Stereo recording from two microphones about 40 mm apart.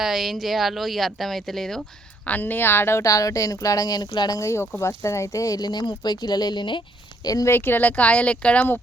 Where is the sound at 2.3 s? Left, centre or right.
Left.